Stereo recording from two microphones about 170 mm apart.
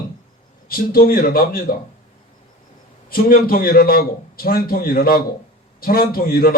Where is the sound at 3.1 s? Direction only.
60° left (ahead or behind).